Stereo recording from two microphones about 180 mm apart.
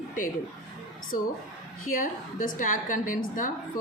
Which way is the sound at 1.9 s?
50° left (ahead or behind).